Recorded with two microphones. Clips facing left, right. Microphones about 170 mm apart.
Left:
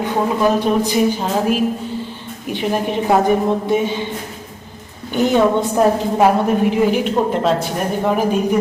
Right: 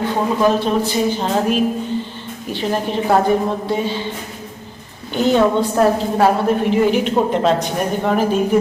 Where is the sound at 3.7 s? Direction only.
15° left (ahead or behind).